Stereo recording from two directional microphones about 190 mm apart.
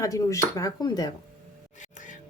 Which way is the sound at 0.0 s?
15° left (ahead or behind).